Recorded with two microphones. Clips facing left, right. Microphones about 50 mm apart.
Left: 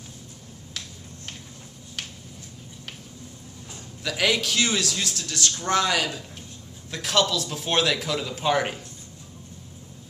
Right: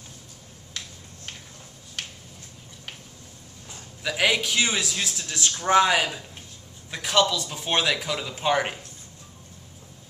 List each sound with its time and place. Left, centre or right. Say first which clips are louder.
0.8 s finger snapping: even; centre
2.0 s finger snapping: even; centre
4.0 s a man's voice: right 1 dB; centre
6.9 s a man's voice: right 1 dB; centre